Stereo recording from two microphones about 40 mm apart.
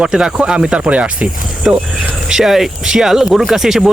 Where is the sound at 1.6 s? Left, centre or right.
Centre.